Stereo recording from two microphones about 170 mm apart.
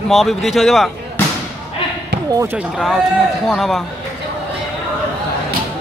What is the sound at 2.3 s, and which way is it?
Speech, 15° right (ahead or behind).